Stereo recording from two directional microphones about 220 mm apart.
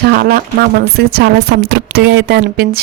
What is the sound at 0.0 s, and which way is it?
Speech, 45° right (ahead or behind).